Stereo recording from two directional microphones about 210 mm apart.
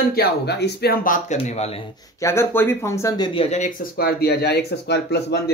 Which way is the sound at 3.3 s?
35° left (ahead or behind).